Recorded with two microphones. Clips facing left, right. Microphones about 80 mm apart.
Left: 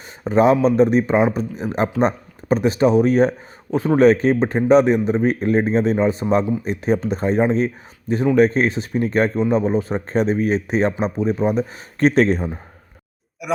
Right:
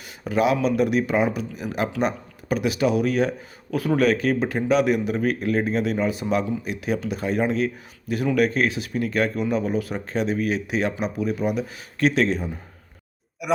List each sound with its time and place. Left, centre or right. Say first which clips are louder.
0.3 s speech: left 6 dB; left
13.4 s speech: even; centre